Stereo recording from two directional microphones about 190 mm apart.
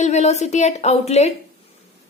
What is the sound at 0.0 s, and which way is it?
A woman's voice, 35° left (ahead or behind).